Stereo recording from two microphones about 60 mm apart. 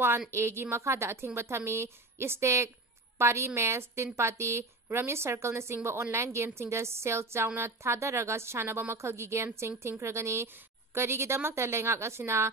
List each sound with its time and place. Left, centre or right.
0.3 s a woman's voice: right